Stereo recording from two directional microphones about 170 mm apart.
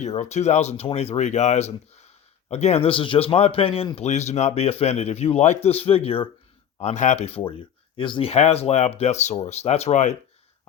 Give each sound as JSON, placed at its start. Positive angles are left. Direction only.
{"t": 0.0, "sound": "a man's voice", "side_deg": 40}